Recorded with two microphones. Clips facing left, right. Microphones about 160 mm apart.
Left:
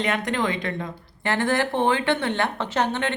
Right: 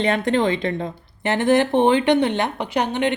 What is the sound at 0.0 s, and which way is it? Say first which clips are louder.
Speech: right 5 dB; 30° right (ahead or behind).